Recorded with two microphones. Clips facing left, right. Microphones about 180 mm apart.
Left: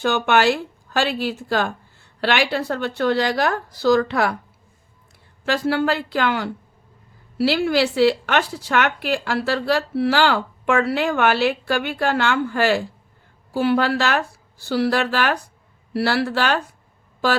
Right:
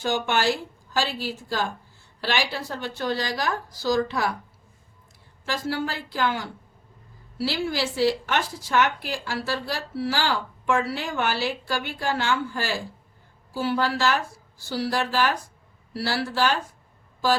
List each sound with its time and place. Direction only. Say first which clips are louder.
0.0 s speech: left 6 dB; 65° left (ahead or behind)
5.5 s a woman's voice: left 8 dB; 65° left (ahead or behind)